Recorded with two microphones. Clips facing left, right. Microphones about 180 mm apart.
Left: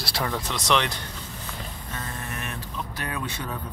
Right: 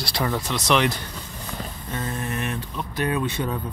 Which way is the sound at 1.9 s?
20° right (ahead or behind).